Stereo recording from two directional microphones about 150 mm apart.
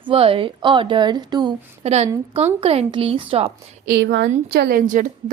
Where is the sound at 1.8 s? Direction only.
45° right (ahead or behind).